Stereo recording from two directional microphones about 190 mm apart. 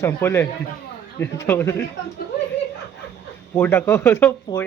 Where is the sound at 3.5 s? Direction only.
10° left (ahead or behind).